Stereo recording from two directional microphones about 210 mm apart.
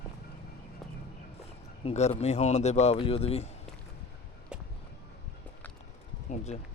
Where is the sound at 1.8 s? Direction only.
30° left (ahead or behind).